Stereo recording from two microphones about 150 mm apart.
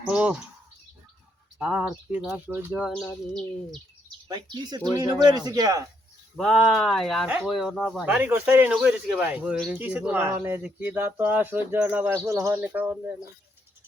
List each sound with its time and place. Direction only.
0.0 s speech: 10° right (ahead or behind)
1.5 s speech: 5° right (ahead or behind)
4.3 s speech: 25° right (ahead or behind)
6.3 s speech: centre (ahead or behind)
8.0 s speech: 10° right (ahead or behind)